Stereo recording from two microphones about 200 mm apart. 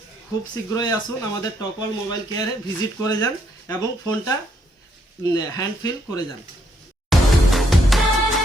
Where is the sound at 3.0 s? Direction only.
15° left (ahead or behind).